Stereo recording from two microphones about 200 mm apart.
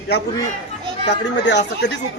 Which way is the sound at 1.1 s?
60° left (ahead or behind).